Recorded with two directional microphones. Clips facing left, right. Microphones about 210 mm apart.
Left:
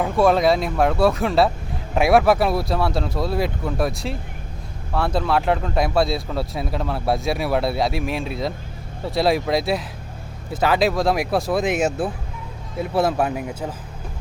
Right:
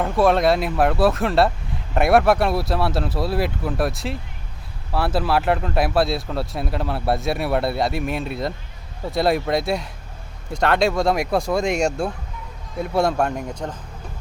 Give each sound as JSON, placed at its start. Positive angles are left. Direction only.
{"t": 0.0, "sound": "speech", "side_deg": 0}